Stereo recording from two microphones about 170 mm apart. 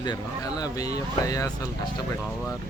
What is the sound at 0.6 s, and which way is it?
Speech, 20° left (ahead or behind).